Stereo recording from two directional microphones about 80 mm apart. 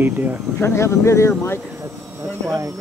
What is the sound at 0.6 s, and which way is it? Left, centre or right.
Speech, left.